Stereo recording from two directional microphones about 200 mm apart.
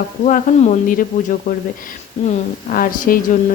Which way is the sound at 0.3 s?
35° left (ahead or behind).